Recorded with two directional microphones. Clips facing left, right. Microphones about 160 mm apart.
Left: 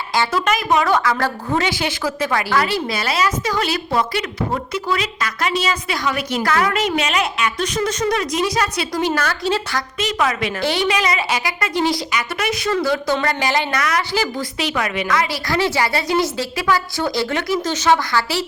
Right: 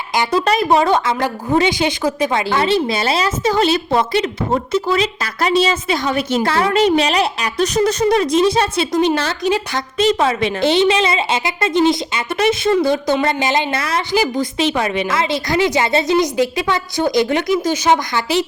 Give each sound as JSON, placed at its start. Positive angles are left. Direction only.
{"t": 0.2, "sound": "a woman's voice", "side_deg": -25}